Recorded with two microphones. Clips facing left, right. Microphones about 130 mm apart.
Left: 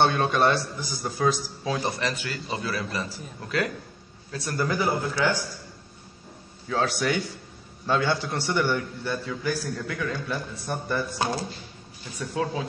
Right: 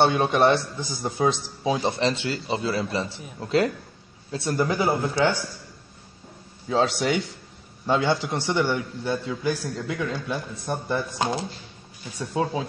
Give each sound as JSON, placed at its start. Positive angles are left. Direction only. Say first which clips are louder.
{"t": 0.0, "sound": "a man's voice", "louder": "right 2 dB", "side_deg": -15}
{"t": 6.7, "sound": "a man's voice", "louder": "right 3 dB", "side_deg": -25}